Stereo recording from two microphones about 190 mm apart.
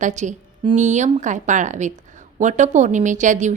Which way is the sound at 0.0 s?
40° right (ahead or behind).